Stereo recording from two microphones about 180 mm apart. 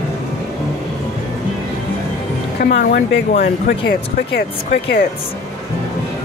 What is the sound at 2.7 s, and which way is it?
Speech, 65° left (ahead or behind).